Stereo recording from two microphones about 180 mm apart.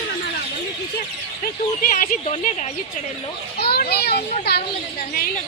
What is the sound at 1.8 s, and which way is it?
Speech, 45° left (ahead or behind).